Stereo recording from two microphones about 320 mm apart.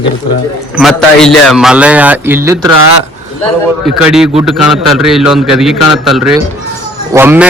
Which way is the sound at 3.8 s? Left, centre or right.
Centre.